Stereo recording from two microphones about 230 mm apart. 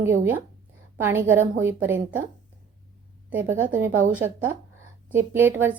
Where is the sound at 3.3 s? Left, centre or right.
Centre.